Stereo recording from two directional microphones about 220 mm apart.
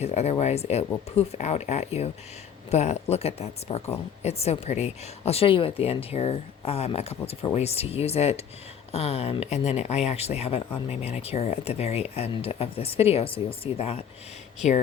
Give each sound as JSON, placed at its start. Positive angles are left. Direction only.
{"t": 0.0, "sound": "speech", "side_deg": 30}